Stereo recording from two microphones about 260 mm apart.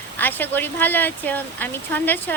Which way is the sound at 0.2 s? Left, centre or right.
Centre.